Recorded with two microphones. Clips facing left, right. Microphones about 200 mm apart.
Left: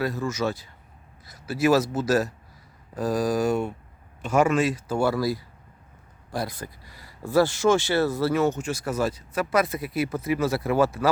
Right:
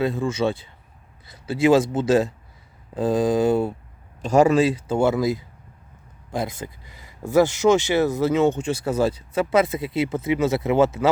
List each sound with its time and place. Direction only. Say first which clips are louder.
0.0 s speech: right 4 dB; 25° right (ahead or behind)